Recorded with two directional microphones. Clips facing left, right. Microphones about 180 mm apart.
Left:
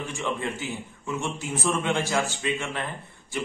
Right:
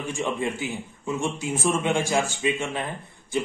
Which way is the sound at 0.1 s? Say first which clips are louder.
Right 5 dB; 15° right (ahead or behind).